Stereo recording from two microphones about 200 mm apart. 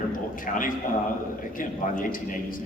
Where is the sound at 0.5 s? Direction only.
40° left (ahead or behind).